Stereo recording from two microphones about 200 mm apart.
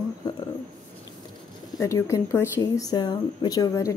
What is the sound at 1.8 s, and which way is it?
A woman's voice, 15° left (ahead or behind).